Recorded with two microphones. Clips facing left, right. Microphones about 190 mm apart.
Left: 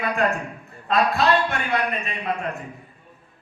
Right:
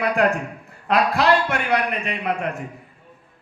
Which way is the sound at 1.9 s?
80° right.